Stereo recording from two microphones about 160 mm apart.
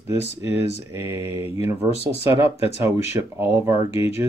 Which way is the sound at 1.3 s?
35° left (ahead or behind).